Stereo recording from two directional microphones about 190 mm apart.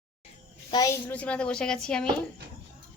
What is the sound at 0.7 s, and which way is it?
Speech, 15° left (ahead or behind).